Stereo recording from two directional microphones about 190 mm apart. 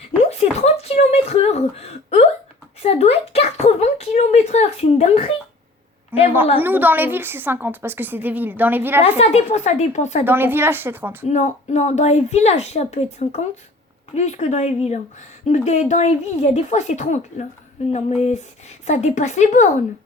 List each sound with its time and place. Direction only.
0.2 s a sound: 35° left (ahead or behind)
6.1 s a sound: 10° right (ahead or behind)
6.6 s a woman's voice: 10° right (ahead or behind)
9.0 s a woman's voice: 35° left (ahead or behind)
10.2 s a woman's voice: 10° right (ahead or behind)
11.3 s a woman's voice: 35° left (ahead or behind)